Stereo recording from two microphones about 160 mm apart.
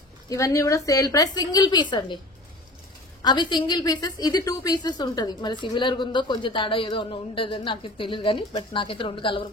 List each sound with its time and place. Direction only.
0.3 s a woman's voice: 20° left (ahead or behind)
3.2 s a woman's voice: 25° left (ahead or behind)